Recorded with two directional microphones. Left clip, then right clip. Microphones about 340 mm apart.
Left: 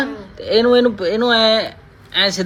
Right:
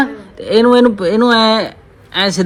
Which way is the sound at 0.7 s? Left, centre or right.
Centre.